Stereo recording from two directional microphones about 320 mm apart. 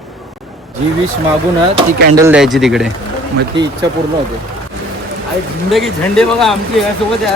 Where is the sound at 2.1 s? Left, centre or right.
Centre.